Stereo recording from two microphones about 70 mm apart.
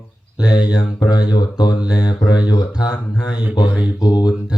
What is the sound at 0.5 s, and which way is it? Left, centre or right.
Speech, left.